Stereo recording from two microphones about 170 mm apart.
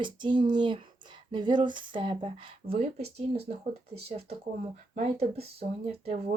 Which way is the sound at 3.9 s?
35° right (ahead or behind).